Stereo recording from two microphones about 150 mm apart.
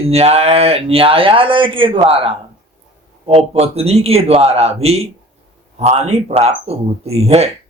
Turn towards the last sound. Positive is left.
turn(degrees=-45)  # may be behind; listen again after turning